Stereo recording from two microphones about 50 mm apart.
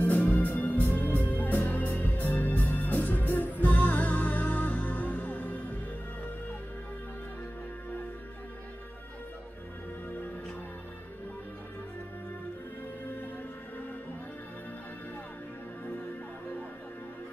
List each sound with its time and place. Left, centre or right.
0.0 s music: left